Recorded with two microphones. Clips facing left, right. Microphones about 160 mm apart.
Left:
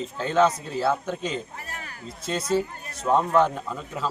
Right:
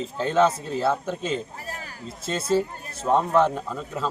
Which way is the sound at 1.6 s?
30° right (ahead or behind).